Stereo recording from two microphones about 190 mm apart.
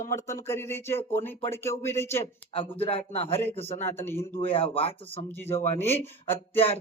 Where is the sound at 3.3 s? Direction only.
10° left (ahead or behind).